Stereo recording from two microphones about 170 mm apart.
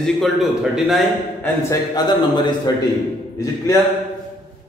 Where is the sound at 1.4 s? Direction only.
20° left (ahead or behind).